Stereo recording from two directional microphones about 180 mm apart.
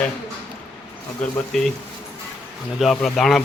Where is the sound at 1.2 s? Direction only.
5° left (ahead or behind).